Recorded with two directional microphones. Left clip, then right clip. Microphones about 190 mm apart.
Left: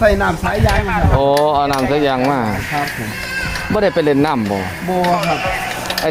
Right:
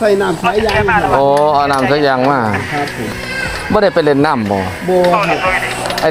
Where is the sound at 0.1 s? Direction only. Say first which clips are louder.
Right 3 dB; 65° left (ahead or behind).